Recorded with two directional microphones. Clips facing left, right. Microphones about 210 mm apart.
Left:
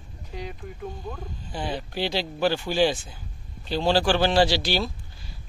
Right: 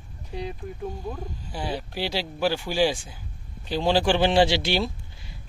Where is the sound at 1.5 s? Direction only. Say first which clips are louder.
Left 1 dB; 10° right (ahead or behind).